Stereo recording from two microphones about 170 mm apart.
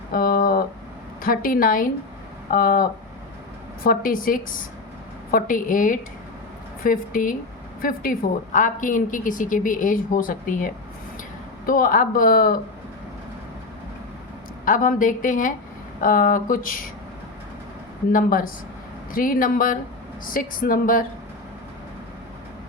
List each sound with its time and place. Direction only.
0.1 s a sound: 55° left (ahead or behind)
1.2 s a woman's voice: 55° left (ahead or behind)
14.6 s a woman's voice: 50° left (ahead or behind)
18.1 s a woman's voice: 55° left (ahead or behind)